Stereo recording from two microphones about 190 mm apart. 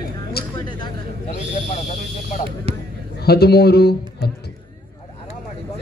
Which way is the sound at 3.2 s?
55° left (ahead or behind).